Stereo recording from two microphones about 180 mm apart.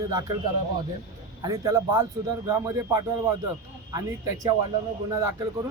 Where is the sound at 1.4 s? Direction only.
20° right (ahead or behind).